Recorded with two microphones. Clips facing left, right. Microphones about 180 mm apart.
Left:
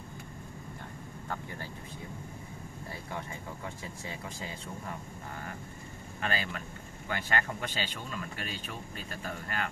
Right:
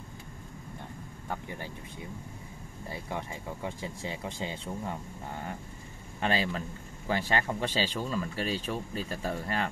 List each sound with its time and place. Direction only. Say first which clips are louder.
1.3 s speech: right 2 dB; 15° right (ahead or behind)
3.1 s speech: right 3 dB; 25° right (ahead or behind)